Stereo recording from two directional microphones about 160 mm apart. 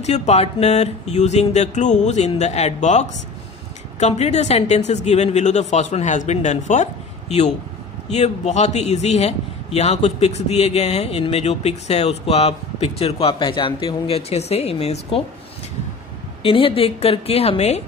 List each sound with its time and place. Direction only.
0.0 s a man's voice: 45° left (ahead or behind)
16.4 s a man's voice: 35° left (ahead or behind)